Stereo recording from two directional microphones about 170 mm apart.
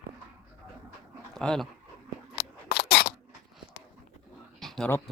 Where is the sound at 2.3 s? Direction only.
65° left (ahead or behind).